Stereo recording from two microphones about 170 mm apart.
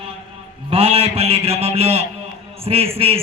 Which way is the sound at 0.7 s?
35° right (ahead or behind).